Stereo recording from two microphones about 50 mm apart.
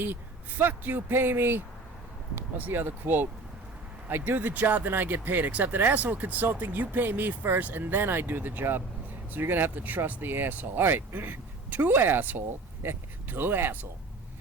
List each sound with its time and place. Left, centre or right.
0.6 s speech: right
4.3 s speech: right